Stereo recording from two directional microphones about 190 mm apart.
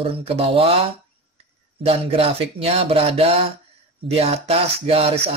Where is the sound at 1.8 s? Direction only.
30° right (ahead or behind).